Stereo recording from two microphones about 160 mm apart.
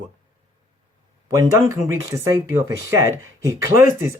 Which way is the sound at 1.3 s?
20° right (ahead or behind).